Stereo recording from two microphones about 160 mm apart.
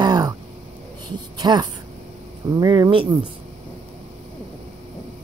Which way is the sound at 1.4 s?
25° right (ahead or behind).